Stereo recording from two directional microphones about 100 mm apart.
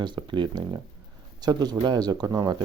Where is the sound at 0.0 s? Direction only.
50° right (ahead or behind).